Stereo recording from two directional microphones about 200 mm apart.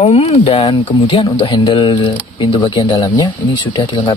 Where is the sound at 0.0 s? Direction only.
30° left (ahead or behind).